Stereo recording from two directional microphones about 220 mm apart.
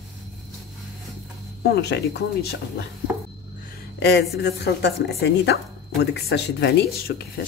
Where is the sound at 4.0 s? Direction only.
50° left (ahead or behind).